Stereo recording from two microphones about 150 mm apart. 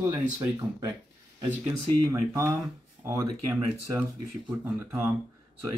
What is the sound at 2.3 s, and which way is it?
Speech, 20° right (ahead or behind).